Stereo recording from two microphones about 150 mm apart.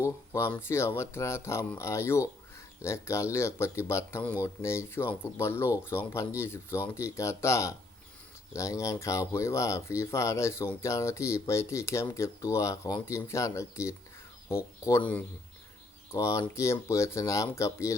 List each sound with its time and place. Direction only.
0.0 s speech: 20° left (ahead or behind)
16.1 s speech: 20° left (ahead or behind)